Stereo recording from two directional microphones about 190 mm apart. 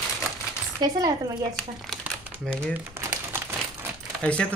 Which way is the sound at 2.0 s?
10° right (ahead or behind).